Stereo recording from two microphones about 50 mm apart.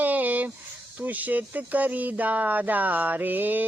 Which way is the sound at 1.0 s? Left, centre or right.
Right.